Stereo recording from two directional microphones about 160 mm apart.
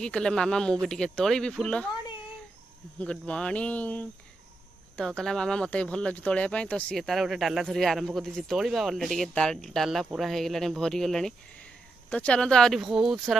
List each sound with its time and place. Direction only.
0.0 s speech: 5° left (ahead or behind)
3.0 s speech: 5° left (ahead or behind)